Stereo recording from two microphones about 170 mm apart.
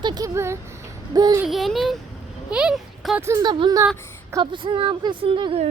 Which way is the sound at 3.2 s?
20° right (ahead or behind).